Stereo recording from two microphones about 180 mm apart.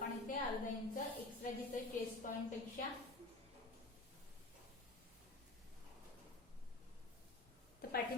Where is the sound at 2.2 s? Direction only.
45° left (ahead or behind).